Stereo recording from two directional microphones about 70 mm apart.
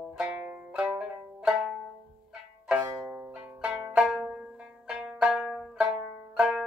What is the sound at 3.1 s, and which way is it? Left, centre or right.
Music, centre.